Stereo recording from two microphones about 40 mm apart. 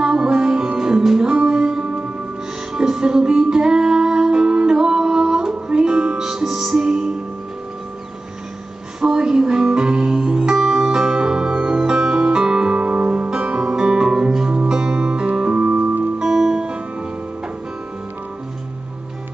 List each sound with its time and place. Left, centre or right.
0.0 s music: centre
1.3 s music: right
1.9 s music: right
2.7 s music: centre
9.0 s music: centre
10.6 s music: centre; by 12.8 s right
12.8 s music: right
13.3 s music: right
15.6 s music: right
16.3 s music: centre
16.5 s music: right